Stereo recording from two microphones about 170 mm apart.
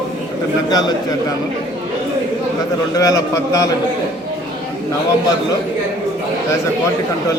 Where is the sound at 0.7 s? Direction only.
25° left (ahead or behind).